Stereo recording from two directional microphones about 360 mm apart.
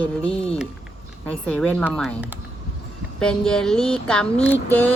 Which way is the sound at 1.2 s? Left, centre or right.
Centre.